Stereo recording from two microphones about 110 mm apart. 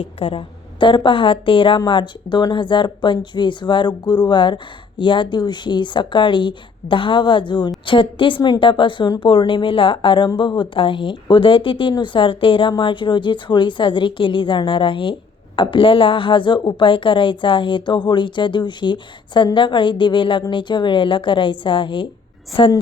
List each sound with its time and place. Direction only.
0.0 s speech: 55° left (ahead or behind)
9.2 s speech: 50° left (ahead or behind)